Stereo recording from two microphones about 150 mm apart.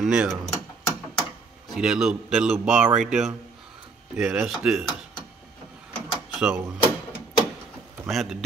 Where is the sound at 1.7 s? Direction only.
5° right (ahead or behind).